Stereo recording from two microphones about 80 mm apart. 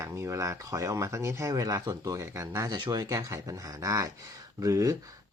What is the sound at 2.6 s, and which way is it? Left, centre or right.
Speech, right.